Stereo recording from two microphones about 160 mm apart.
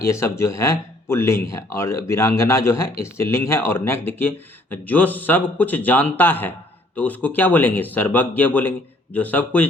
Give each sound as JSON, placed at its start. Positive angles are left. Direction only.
{"t": 0.0, "sound": "speech", "side_deg": 20}